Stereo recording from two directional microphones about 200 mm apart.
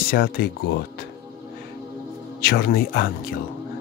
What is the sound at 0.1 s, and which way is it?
Speech, 50° left (ahead or behind).